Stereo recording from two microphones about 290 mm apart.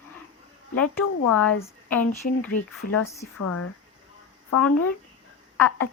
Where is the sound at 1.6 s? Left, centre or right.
Centre.